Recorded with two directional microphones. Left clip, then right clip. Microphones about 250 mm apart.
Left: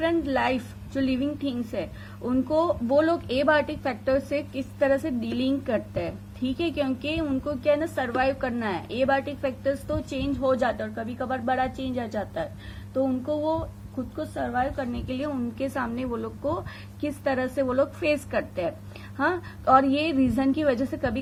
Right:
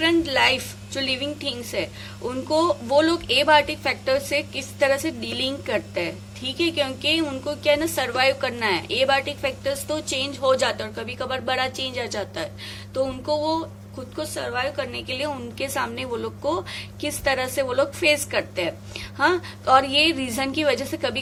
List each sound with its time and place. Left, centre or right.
0.0 s a woman's voice: centre